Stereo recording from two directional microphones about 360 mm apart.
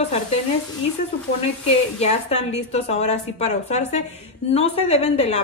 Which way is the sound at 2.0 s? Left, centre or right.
Centre.